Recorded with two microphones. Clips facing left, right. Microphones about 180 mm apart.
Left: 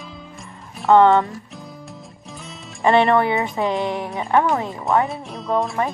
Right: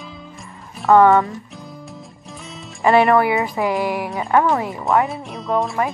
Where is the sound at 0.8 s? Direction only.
Centre (ahead or behind).